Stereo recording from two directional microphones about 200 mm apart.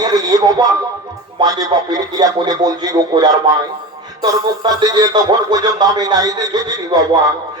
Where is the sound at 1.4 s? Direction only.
20° right (ahead or behind).